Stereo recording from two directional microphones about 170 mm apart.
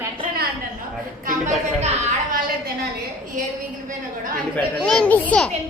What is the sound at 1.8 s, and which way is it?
A woman's voice, 40° right (ahead or behind).